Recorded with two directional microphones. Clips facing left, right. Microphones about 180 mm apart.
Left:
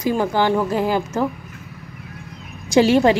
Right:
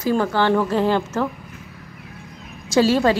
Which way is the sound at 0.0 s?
15° left (ahead or behind).